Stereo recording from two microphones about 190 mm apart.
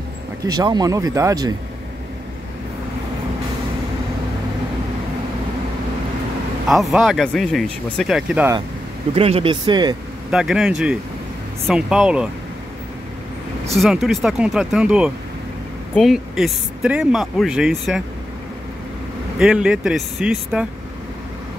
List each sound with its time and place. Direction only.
0.4 s speech: 20° right (ahead or behind)
6.7 s speech: centre (ahead or behind)
9.1 s speech: 30° right (ahead or behind)
10.3 s speech: centre (ahead or behind)
13.7 s speech: centre (ahead or behind)
19.3 s speech: 5° right (ahead or behind)